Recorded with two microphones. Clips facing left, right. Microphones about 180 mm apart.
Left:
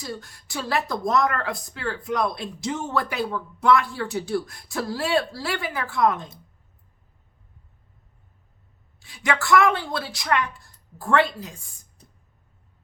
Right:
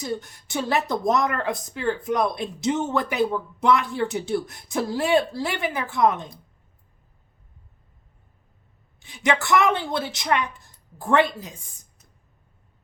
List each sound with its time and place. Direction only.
0.0 s speech: 20° right (ahead or behind)
9.0 s speech: 20° right (ahead or behind)